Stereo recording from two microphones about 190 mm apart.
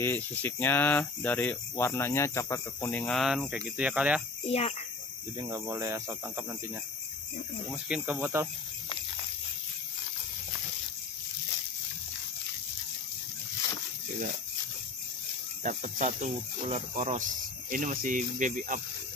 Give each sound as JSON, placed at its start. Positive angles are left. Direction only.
{"t": 0.0, "sound": "speech", "side_deg": 10}
{"t": 4.5, "sound": "a child's voice", "side_deg": 35}
{"t": 5.4, "sound": "speech", "side_deg": -20}
{"t": 7.7, "sound": "speech", "side_deg": -10}
{"t": 15.6, "sound": "speech", "side_deg": -40}